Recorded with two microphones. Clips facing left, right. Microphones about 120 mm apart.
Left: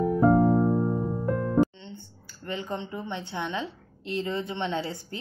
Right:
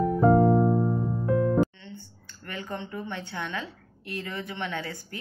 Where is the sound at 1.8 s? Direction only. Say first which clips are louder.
Left 1 dB; 20° left (ahead or behind).